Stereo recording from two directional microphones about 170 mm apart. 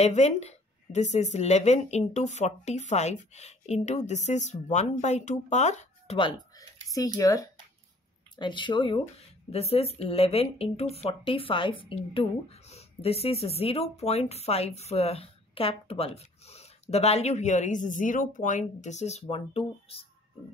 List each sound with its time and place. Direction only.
0.0 s speech: 40° left (ahead or behind)
6.1 s speech: 25° left (ahead or behind)